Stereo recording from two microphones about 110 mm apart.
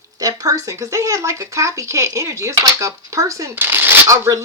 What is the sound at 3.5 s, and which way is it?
Speech, 20° right (ahead or behind).